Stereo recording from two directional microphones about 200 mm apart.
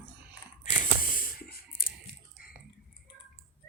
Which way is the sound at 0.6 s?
40° left (ahead or behind).